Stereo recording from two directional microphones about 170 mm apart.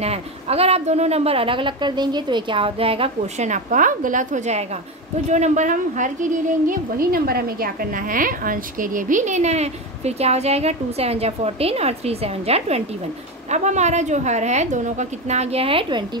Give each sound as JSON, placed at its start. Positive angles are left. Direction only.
{"t": 0.0, "sound": "a woman's voice", "side_deg": -35}